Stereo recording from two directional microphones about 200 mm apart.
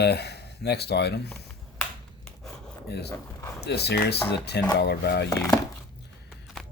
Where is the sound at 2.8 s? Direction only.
55° left (ahead or behind).